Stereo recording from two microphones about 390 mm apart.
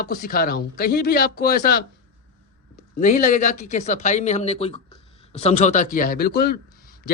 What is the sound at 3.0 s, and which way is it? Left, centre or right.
Speech, centre.